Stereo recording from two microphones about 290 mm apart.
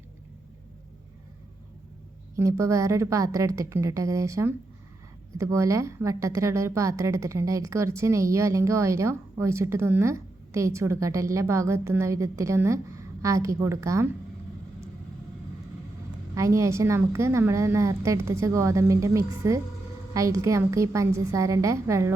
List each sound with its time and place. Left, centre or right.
2.3 s a woman's voice: centre
16.3 s a woman's voice: centre